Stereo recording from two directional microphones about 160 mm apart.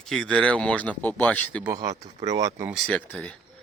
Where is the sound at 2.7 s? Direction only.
5° left (ahead or behind).